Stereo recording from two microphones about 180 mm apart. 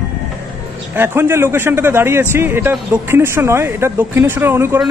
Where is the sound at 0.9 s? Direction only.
10° right (ahead or behind).